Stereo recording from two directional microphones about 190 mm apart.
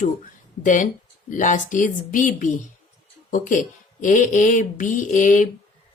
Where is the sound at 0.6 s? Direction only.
40° left (ahead or behind).